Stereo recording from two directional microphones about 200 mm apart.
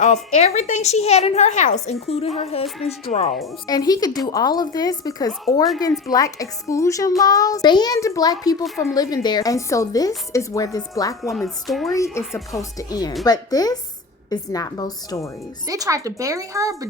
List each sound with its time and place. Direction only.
0.0 s a woman's voice: 35° left (ahead or behind)
2.6 s music: centre (ahead or behind)
3.1 s a woman's voice: 35° left (ahead or behind)
3.7 s a child's voice: 20° left (ahead or behind)
11.2 s music: centre (ahead or behind)
12.1 s a woman's voice: 15° left (ahead or behind)
15.6 s speech: 15° right (ahead or behind)